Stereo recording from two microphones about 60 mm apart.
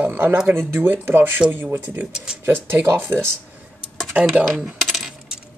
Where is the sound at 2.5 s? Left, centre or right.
Right.